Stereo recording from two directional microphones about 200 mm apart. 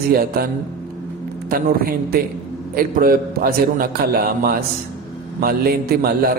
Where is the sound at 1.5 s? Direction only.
45° right (ahead or behind).